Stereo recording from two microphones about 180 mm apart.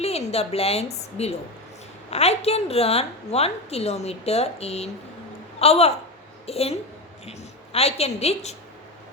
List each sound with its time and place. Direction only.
0.0 s a woman's voice: 35° left (ahead or behind)